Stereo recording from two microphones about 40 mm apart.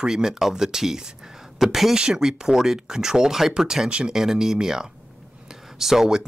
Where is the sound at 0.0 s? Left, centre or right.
Centre.